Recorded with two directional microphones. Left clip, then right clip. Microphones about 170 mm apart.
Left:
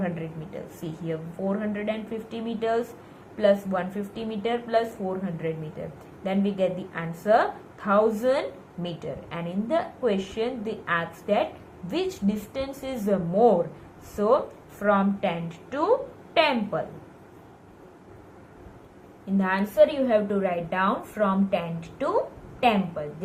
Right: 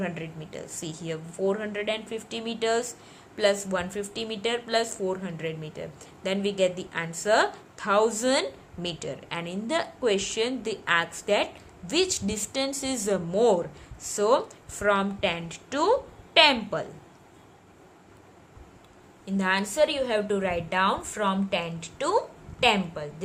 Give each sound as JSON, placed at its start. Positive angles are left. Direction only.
{"t": 0.0, "sound": "speech", "side_deg": -90}
{"t": 19.2, "sound": "speech", "side_deg": -90}